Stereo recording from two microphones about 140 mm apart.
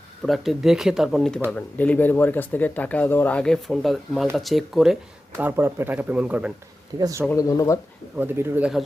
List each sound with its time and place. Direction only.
0.3 s speech: centre (ahead or behind)
5.4 s speech: 15° right (ahead or behind)
7.0 s speech: 25° right (ahead or behind)
7.3 s speech: 25° left (ahead or behind)
8.2 s speech: 15° right (ahead or behind)